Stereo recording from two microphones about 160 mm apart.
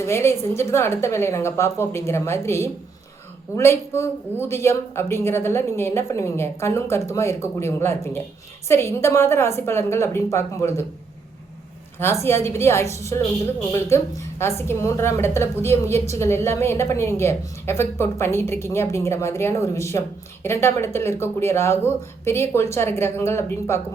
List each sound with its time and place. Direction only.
0.0 s a woman's voice: 15° left (ahead or behind)
12.2 s a woman's voice: 15° left (ahead or behind)